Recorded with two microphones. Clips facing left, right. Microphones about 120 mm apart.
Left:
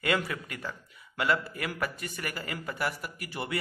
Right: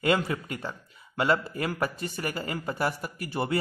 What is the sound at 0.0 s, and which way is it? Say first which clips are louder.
Speech: right 4 dB; 25° right (ahead or behind).